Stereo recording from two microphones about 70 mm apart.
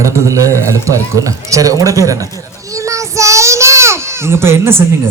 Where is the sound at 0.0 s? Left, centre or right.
Right.